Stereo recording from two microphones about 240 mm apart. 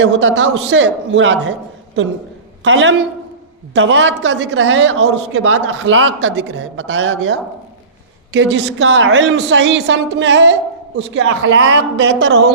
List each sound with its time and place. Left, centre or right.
0.0 s speech: right
2.6 s speech: right